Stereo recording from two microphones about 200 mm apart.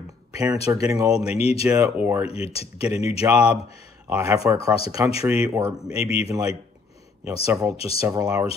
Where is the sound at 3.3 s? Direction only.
5° right (ahead or behind).